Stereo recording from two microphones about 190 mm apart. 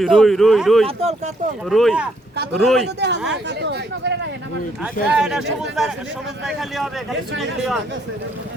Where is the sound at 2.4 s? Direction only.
60° right (ahead or behind).